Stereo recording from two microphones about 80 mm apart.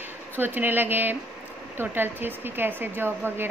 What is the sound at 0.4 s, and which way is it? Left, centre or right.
A woman's voice, right.